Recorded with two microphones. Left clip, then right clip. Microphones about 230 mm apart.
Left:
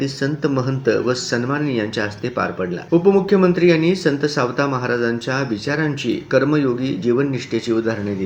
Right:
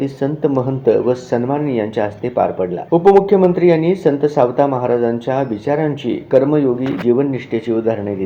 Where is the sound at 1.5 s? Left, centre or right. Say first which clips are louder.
Right 3 dB; centre.